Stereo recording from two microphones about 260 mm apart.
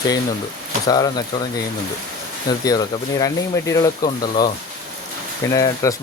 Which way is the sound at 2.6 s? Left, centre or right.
Centre.